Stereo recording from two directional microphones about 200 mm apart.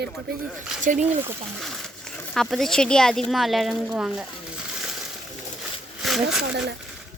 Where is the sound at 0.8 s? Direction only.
40° right (ahead or behind).